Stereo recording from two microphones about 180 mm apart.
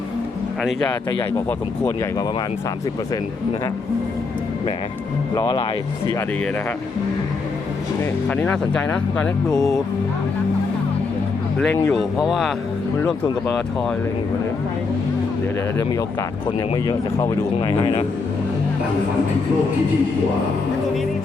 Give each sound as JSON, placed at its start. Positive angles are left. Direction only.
{"t": 1.5, "sound": "speech", "side_deg": 15}
{"t": 5.3, "sound": "speech", "side_deg": 25}
{"t": 8.3, "sound": "speech", "side_deg": 5}
{"t": 11.9, "sound": "speech", "side_deg": 0}
{"t": 16.5, "sound": "speech", "side_deg": 20}